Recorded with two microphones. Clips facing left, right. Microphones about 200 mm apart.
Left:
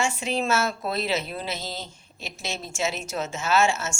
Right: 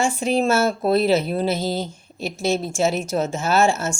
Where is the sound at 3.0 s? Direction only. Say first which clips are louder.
Right 6 dB; 40° right (ahead or behind).